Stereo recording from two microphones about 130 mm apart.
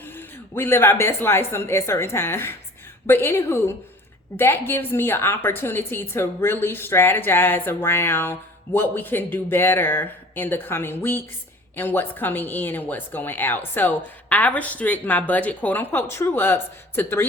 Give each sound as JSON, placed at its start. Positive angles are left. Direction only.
{"t": 0.0, "sound": "a woman's voice", "side_deg": 15}